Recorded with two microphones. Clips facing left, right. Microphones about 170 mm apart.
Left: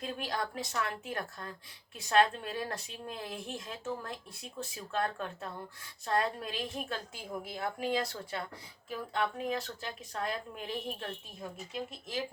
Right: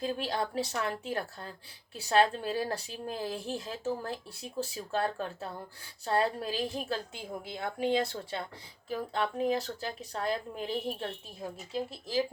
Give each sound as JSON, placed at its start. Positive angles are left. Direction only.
{"t": 0.0, "sound": "a woman's voice", "side_deg": -30}